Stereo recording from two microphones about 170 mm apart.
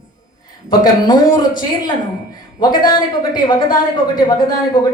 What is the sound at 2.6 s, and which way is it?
A woman's voice, 25° left (ahead or behind).